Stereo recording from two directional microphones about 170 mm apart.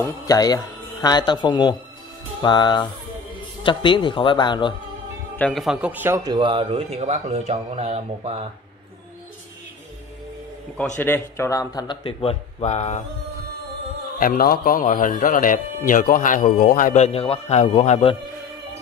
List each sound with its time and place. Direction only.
0.0 s speech: 20° left (ahead or behind)
5.3 s a man's voice: 5° left (ahead or behind); by 8.5 s 35° right (ahead or behind)
11.0 s speech: 10° left (ahead or behind); by 13.0 s 40° left (ahead or behind)
14.1 s speech: 55° left (ahead or behind)